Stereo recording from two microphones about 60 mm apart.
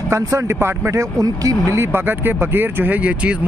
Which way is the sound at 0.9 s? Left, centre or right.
Right.